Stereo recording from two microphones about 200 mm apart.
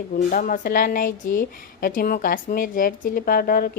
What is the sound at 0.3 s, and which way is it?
A woman's voice, 40° left (ahead or behind).